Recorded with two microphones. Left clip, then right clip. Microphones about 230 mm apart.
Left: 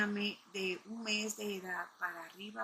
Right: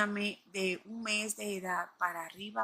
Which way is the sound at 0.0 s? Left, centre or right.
Right.